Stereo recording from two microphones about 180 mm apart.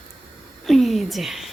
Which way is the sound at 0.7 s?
Centre (ahead or behind).